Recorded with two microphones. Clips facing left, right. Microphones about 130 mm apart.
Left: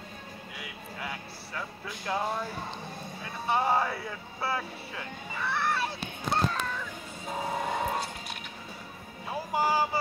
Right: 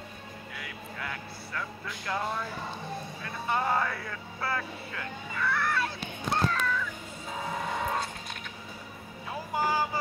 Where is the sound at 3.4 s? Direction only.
20° left (ahead or behind).